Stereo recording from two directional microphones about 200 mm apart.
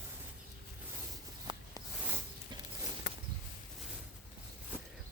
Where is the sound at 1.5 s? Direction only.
20° right (ahead or behind).